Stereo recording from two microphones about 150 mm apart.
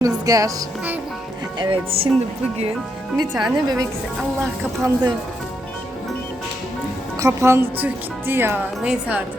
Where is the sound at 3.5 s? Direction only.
25° right (ahead or behind).